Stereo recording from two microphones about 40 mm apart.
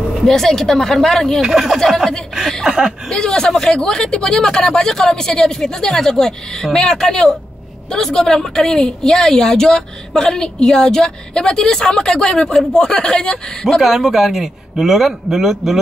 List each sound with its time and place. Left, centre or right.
0.2 s a woman's voice: centre
1.4 s a man's voice: centre
3.1 s a woman's voice: centre
13.7 s a man's voice: centre